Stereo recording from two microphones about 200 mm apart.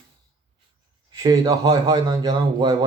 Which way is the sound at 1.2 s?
15° right (ahead or behind).